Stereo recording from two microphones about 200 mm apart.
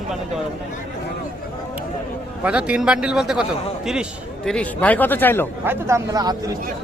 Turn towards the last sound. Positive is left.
turn(degrees=-20)  # may be behind; listen again after turning